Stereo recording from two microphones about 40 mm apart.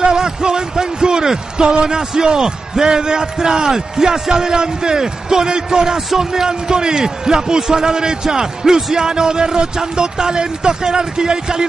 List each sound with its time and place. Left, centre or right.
0.0 s speech: centre